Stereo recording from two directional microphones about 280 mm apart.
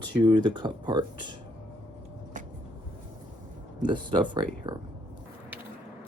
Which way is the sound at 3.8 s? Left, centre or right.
Centre.